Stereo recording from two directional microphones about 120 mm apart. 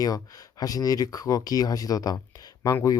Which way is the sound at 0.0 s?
30° left (ahead or behind).